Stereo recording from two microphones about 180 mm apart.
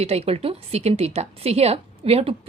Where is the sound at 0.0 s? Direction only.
35° right (ahead or behind).